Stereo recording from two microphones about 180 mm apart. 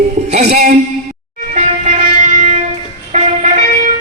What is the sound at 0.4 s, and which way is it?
Speech, 60° right (ahead or behind).